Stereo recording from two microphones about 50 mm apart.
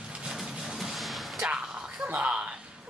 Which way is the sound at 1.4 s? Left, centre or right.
Centre.